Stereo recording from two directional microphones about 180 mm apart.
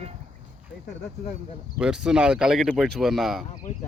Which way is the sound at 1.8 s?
5° right (ahead or behind).